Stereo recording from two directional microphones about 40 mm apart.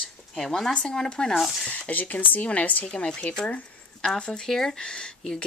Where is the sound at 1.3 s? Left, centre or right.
Centre.